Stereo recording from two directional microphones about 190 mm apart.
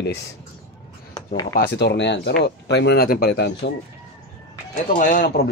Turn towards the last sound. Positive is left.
turn(degrees=55)  # may be behind; listen again after turning